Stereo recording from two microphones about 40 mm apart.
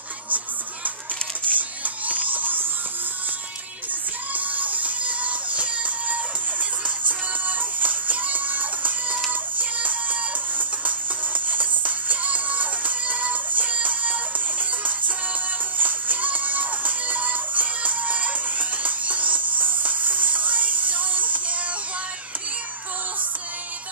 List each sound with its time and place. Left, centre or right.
1.5 s music: right
2.0 s a sound: right
4.3 s music: right